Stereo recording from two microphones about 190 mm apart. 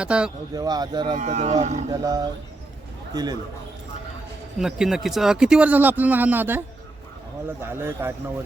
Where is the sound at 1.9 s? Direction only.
20° right (ahead or behind).